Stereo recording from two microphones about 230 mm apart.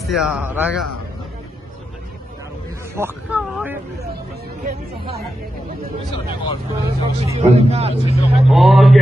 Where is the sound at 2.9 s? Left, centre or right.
Centre.